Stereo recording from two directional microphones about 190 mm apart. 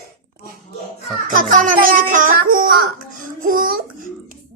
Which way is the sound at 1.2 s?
45° right (ahead or behind).